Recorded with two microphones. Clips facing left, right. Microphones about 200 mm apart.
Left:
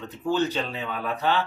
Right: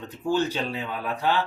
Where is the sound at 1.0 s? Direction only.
10° right (ahead or behind).